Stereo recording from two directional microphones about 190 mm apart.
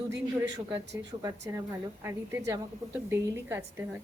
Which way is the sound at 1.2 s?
15° right (ahead or behind).